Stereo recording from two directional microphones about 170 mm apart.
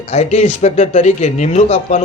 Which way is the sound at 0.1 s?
40° left (ahead or behind).